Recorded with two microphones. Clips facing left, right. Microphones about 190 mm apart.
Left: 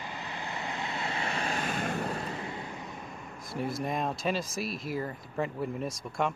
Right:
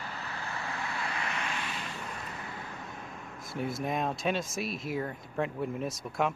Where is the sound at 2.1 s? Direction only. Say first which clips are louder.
Left 6 dB; 30° left (ahead or behind).